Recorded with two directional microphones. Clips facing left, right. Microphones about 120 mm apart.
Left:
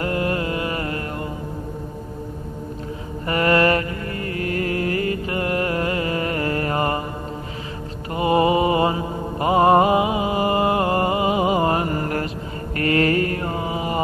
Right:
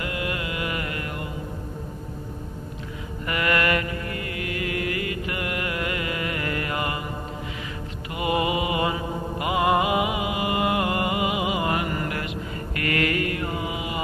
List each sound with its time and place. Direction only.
0.0 s music: 40° left (ahead or behind)
3.3 s mantra: 35° left (ahead or behind)
8.1 s mantra: 35° left (ahead or behind)